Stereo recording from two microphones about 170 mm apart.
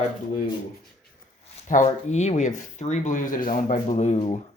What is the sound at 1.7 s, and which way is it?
Speech, 45° left (ahead or behind).